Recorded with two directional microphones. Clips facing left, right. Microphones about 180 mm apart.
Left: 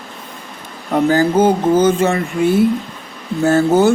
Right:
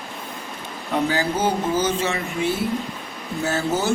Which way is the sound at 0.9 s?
50° left (ahead or behind).